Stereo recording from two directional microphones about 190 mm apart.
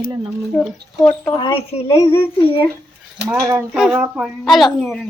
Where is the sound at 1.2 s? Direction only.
20° left (ahead or behind).